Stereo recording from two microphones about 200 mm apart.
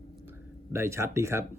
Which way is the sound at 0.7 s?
15° right (ahead or behind).